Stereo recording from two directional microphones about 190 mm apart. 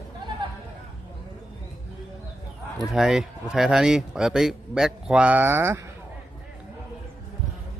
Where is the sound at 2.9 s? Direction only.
Centre (ahead or behind).